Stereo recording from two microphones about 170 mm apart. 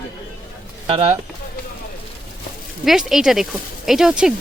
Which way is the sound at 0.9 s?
35° right (ahead or behind).